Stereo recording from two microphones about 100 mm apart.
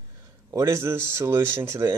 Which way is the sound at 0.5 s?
30° right (ahead or behind).